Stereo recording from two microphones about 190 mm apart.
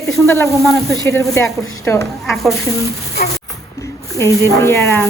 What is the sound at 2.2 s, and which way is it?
Speech, centre (ahead or behind).